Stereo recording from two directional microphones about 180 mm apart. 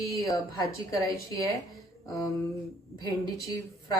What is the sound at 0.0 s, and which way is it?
A woman's voice, 20° left (ahead or behind).